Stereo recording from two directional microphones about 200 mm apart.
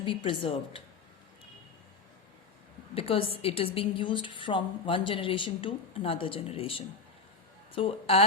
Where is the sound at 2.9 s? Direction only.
25° left (ahead or behind).